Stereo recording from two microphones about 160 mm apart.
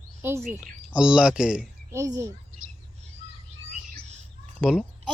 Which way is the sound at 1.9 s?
20° right (ahead or behind).